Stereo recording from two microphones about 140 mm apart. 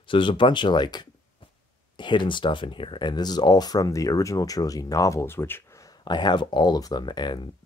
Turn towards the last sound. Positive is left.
turn(degrees=30)  # may be behind; listen again after turning